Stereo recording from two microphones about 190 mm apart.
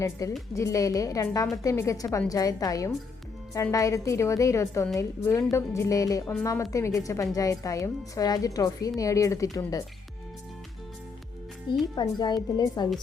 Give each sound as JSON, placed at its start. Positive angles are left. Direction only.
{"t": 0.0, "sound": "a woman's voice", "side_deg": 15}
{"t": 11.9, "sound": "a woman's voice", "side_deg": 20}